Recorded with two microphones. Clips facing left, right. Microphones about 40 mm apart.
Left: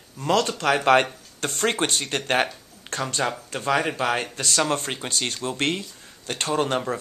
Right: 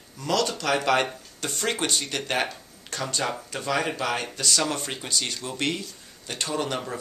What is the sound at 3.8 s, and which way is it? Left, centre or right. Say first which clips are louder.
Speech: left 3 dB; left.